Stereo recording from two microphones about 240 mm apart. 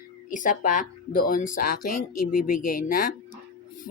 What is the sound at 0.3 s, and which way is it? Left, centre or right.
Speech, left.